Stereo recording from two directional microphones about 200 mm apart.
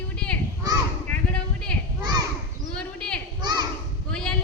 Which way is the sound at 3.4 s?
20° right (ahead or behind).